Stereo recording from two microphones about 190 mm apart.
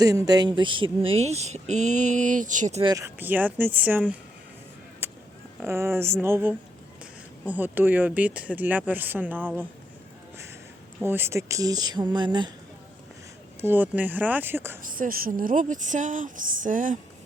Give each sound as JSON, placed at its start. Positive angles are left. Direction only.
{"t": 0.0, "sound": "speech", "side_deg": -20}
{"t": 2.8, "sound": "speech", "side_deg": -15}
{"t": 5.0, "sound": "a sound", "side_deg": -10}
{"t": 5.6, "sound": "speech", "side_deg": -15}
{"t": 11.0, "sound": "speech", "side_deg": -10}
{"t": 13.6, "sound": "speech", "side_deg": -10}
{"t": 14.9, "sound": "a woman's voice", "side_deg": -50}